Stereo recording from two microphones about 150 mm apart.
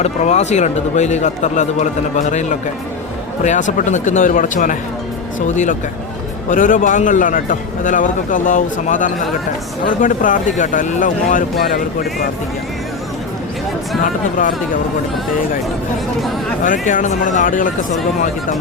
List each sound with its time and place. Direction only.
0.0 s a man's voice: 50° left (ahead or behind)
6.5 s a man's voice: 60° left (ahead or behind)
14.0 s a man's voice: 65° left (ahead or behind)
16.6 s a man's voice: 60° left (ahead or behind)